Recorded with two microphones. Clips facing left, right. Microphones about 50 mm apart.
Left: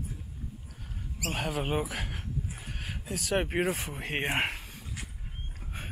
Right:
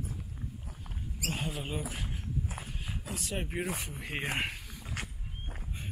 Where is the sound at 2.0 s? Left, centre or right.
Left.